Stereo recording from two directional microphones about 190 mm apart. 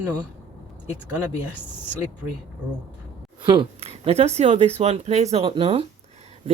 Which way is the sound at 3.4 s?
25° right (ahead or behind).